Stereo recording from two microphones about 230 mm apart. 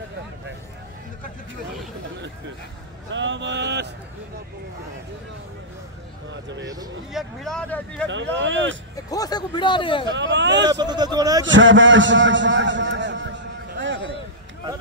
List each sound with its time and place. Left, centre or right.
3.1 s speech: right
6.6 s speech: centre
7.1 s speech: centre
8.1 s speech: right
8.9 s speech: centre
10.0 s speech: right
10.7 s speech: centre
11.4 s a sound: right